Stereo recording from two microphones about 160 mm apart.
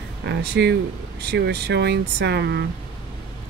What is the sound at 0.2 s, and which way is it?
Speech, 90° right.